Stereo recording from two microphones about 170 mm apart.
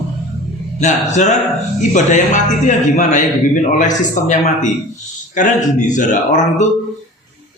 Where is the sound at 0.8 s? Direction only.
45° left (ahead or behind).